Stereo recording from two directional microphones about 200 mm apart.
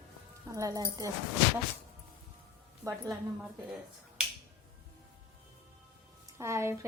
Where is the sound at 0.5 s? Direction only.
15° right (ahead or behind).